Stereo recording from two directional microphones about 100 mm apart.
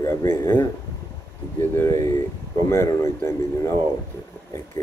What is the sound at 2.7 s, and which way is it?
Speech, 25° left (ahead or behind).